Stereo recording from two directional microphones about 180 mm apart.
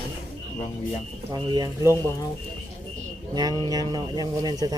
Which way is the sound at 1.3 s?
20° right (ahead or behind).